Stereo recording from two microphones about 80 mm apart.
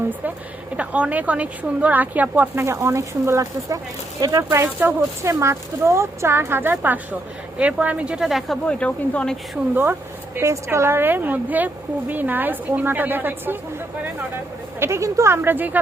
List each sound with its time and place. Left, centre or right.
0.8 s speech: centre
2.6 s speech: right
4.5 s a woman's voice: right
5.2 s speech: right; by 8.5 s centre
8.6 s speech: centre
10.4 s a woman's voice: right
14.8 s speech: right